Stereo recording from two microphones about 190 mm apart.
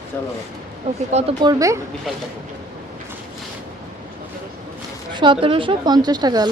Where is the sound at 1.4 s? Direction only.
15° right (ahead or behind).